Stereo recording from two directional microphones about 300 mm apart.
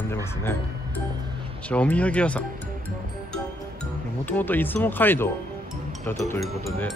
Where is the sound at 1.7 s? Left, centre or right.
Centre.